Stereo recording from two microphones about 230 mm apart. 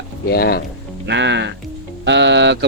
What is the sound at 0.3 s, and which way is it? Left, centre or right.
Speech, left.